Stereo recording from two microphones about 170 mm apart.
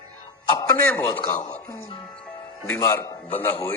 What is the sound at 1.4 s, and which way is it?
Speech, 45° left (ahead or behind).